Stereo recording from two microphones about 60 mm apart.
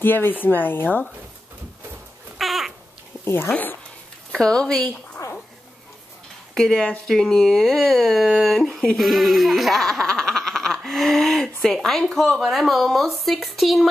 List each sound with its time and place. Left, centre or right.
0.0 s speech: left
2.3 s babbling: centre
4.3 s speech: centre
6.5 s speech: centre